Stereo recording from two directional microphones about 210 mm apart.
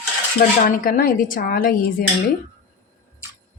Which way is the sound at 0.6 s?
40° left (ahead or behind).